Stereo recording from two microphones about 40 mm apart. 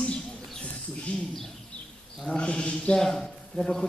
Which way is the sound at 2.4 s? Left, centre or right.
Left.